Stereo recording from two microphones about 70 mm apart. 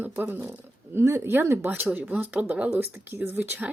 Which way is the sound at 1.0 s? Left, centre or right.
Right.